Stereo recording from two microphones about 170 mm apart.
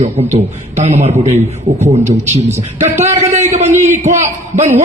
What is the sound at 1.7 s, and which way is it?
Speech, 55° right (ahead or behind).